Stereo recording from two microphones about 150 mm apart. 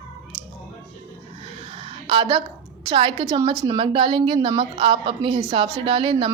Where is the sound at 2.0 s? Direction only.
30° right (ahead or behind).